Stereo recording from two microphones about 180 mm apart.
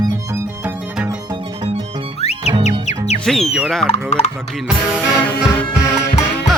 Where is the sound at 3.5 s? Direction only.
Centre (ahead or behind).